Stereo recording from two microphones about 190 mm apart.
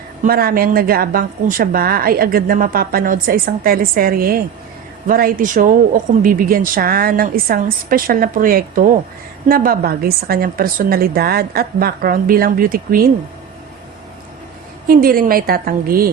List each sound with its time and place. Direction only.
0.3 s a woman's voice: 50° right (ahead or behind)
14.8 s a woman's voice: 50° right (ahead or behind)